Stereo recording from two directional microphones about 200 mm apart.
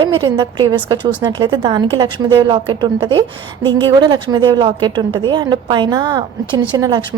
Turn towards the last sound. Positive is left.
turn(degrees=-20)  # may be behind; listen again after turning